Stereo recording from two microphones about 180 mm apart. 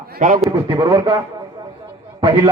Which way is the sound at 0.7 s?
20° right (ahead or behind).